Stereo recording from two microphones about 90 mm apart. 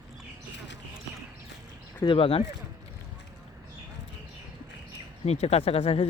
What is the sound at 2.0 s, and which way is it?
Speech, 80° left.